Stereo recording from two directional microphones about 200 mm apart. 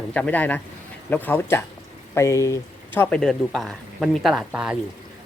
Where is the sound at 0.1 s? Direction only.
5° left (ahead or behind).